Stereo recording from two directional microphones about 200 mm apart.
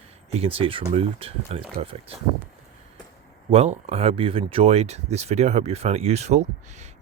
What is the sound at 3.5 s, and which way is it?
Speech, 30° right (ahead or behind).